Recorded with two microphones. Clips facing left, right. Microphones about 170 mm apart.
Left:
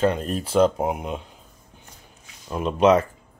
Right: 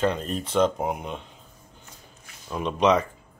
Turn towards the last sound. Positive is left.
turn(degrees=5)  # may be behind; listen again after turning